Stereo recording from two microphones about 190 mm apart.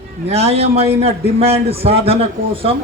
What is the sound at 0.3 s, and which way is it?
A man's voice, 35° right (ahead or behind).